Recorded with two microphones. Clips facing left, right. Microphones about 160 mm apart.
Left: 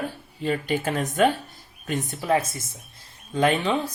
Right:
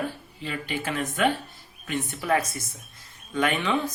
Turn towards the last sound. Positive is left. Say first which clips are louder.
# left 3 dB
turn(degrees=35)  # may be behind; listen again after turning